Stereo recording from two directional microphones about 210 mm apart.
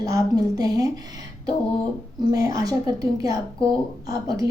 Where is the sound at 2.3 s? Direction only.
15° right (ahead or behind).